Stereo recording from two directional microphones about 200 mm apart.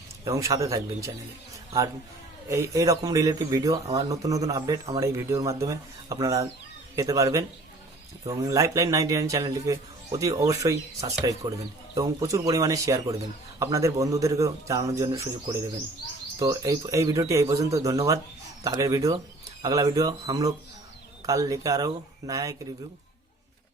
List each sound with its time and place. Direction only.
0.3 s speech: 15° right (ahead or behind)
2.5 s speech: 15° right (ahead or behind)